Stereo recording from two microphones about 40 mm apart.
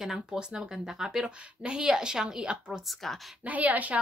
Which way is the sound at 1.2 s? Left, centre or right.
Right.